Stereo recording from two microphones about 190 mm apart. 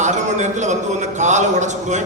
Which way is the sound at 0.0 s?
40° right (ahead or behind).